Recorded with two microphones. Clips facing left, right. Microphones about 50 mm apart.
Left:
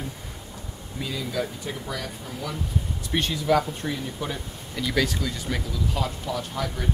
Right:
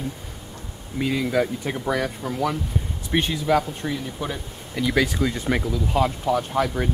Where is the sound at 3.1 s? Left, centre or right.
Centre.